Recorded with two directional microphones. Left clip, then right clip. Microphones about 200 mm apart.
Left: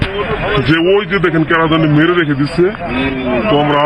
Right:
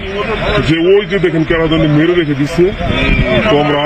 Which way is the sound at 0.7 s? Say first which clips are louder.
Right 1 dB; 15° right (ahead or behind).